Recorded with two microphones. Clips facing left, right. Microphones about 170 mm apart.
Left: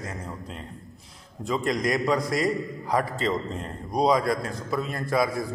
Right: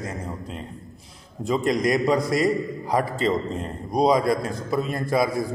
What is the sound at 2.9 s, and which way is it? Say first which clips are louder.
A man's voice: right 3 dB; 20° right (ahead or behind).